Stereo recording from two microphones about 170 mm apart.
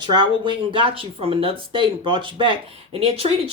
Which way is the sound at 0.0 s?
25° right (ahead or behind).